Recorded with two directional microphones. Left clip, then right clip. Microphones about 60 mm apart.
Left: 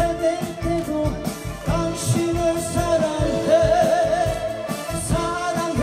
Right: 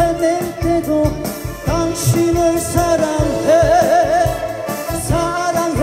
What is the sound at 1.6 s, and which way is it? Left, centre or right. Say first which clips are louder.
Music: right 6 dB; right.